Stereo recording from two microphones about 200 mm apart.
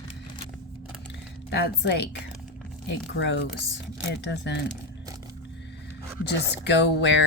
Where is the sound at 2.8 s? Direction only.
60° left (ahead or behind).